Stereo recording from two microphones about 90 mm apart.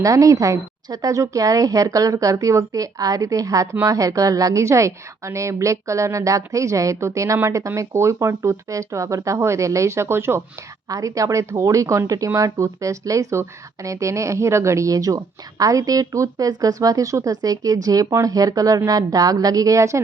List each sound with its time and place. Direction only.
0.0 s speech: 40° right (ahead or behind)
10.8 s speech: 40° right (ahead or behind)